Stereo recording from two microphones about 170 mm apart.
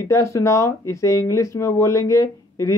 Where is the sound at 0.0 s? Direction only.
15° left (ahead or behind).